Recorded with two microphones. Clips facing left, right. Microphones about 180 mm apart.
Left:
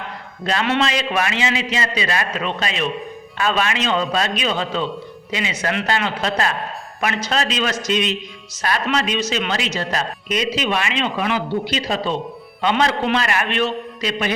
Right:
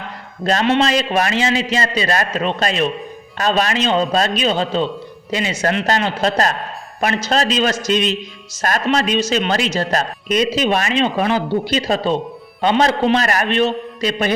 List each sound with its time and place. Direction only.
0.4 s a man's voice: 40° right (ahead or behind)